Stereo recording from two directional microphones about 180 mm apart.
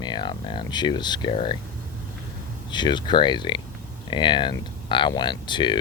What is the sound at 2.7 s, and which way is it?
Speech, 25° left (ahead or behind).